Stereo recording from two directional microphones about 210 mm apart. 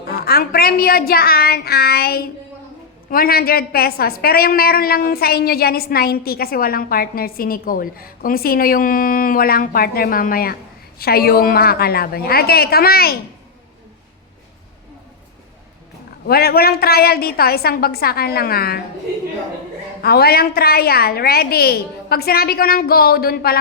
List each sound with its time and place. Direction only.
0.1 s a woman's voice: 45° left (ahead or behind)
16.2 s a woman's voice: 45° left (ahead or behind)
20.0 s a woman's voice: 50° left (ahead or behind)